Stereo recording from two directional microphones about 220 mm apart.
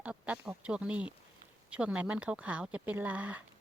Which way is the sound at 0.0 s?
5° right (ahead or behind).